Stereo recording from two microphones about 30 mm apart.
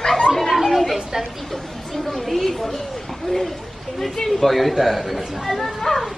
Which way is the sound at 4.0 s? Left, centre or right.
Centre.